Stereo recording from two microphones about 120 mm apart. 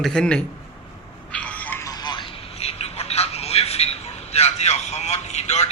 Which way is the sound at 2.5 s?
60° left (ahead or behind).